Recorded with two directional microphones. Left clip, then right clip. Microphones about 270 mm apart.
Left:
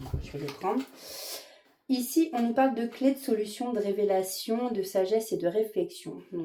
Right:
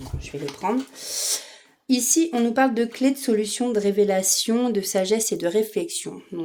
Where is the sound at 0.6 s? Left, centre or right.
Right.